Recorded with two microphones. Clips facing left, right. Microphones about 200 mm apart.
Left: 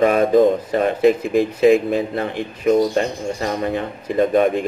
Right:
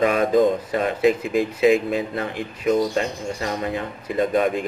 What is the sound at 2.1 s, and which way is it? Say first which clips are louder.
Speech: left 4 dB; 30° left (ahead or behind).